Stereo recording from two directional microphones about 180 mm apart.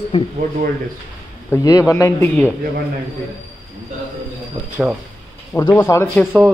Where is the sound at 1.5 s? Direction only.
20° left (ahead or behind).